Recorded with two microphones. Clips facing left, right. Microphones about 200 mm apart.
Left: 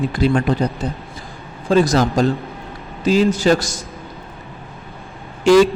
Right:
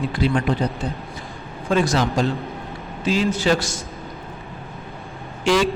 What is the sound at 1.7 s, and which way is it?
A man's voice, 40° left (ahead or behind).